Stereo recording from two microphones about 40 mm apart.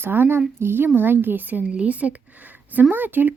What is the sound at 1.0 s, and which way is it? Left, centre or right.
Speech, right.